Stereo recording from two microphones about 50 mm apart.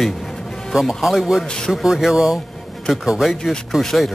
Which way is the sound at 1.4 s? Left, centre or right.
Centre.